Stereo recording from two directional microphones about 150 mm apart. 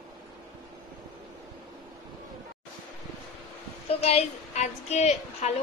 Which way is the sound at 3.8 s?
45° left (ahead or behind).